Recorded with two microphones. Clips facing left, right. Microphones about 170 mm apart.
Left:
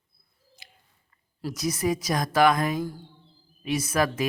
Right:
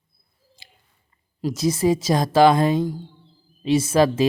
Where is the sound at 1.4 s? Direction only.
20° right (ahead or behind).